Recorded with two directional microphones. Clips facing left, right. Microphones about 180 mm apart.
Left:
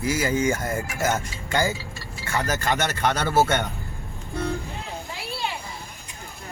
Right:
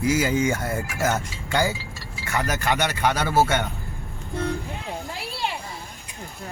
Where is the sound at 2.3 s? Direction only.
15° right (ahead or behind).